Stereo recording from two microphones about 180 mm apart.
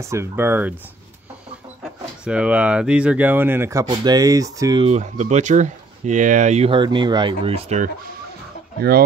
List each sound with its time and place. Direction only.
0.0 s speech: 15° right (ahead or behind)
1.8 s speech: 5° right (ahead or behind)
4.8 s speech: 40° right (ahead or behind)
6.7 s speech: 25° right (ahead or behind)